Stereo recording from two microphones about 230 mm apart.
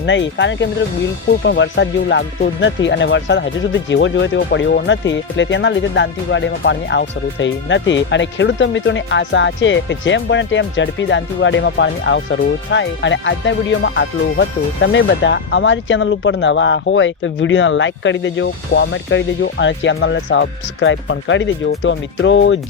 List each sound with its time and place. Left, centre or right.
0.0 s speech: left